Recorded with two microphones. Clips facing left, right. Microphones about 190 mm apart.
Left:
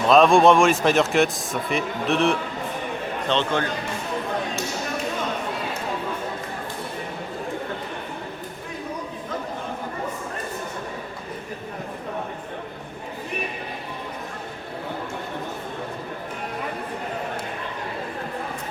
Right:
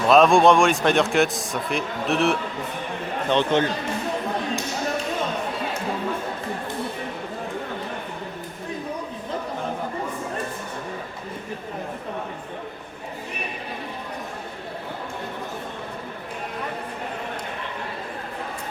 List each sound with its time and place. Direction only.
0.1 s a man's voice: centre (ahead or behind)
3.2 s a man's voice: 15° right (ahead or behind)